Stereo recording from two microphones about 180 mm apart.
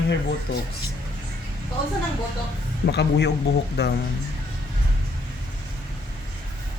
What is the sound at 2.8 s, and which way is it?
Speech, 65° left (ahead or behind).